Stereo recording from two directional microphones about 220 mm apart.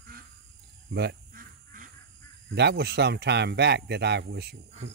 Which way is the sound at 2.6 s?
50° right (ahead or behind).